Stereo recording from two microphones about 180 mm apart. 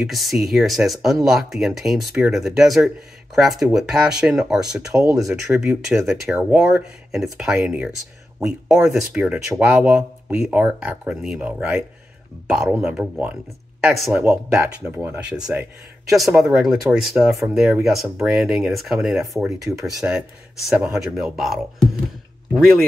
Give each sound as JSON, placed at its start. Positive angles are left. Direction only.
{"t": 0.0, "sound": "speech", "side_deg": 0}
{"t": 14.2, "sound": "speech", "side_deg": -10}